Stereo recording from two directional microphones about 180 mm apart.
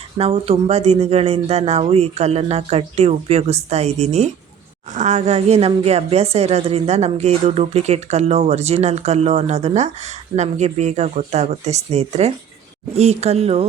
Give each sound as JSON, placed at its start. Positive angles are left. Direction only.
{"t": 0.2, "sound": "a woman's voice", "side_deg": -30}